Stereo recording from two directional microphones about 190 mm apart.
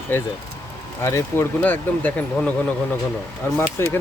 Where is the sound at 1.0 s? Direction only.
15° left (ahead or behind).